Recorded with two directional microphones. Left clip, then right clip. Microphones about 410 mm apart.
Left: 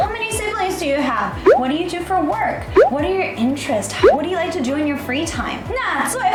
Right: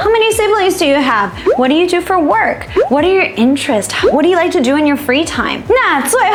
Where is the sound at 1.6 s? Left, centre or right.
Right.